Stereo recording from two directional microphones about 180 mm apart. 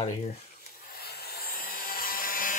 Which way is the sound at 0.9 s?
60° left (ahead or behind).